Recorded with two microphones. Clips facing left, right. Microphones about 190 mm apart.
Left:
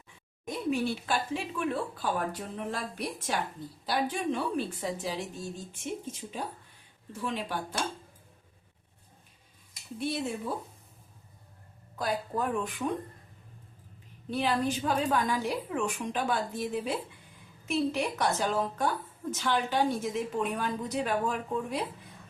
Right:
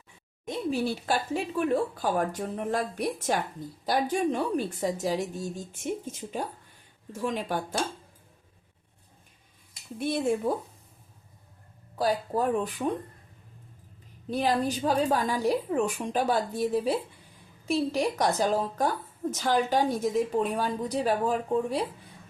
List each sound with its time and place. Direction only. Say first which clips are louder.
0.4 s speech: right 1 dB; 30° right (ahead or behind)
10.0 s speech: right 5 dB; 50° right (ahead or behind)
11.9 s a woman's voice: right 5 dB; 35° right (ahead or behind)
14.3 s a woman's voice: right 2 dB; 40° right (ahead or behind)